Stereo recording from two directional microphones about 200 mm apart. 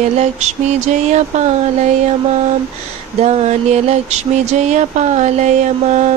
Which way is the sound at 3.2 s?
35° right (ahead or behind).